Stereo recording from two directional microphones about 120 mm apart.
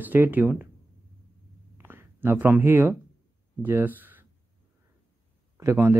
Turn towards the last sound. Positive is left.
turn(degrees=-20)  # may be behind; listen again after turning